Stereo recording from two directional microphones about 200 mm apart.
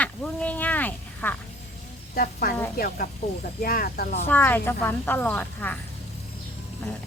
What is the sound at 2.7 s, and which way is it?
Speech, 50° left (ahead or behind).